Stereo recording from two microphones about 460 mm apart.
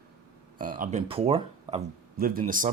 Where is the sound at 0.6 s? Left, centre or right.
Centre.